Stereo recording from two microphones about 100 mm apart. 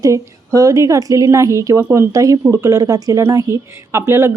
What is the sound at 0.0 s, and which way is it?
A woman's voice, 35° right (ahead or behind).